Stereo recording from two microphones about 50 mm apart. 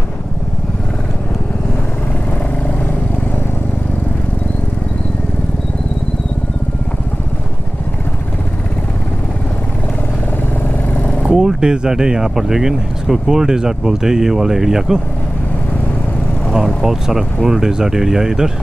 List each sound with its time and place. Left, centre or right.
10.9 s vehicle: left
11.3 s speech: centre
16.5 s speech: centre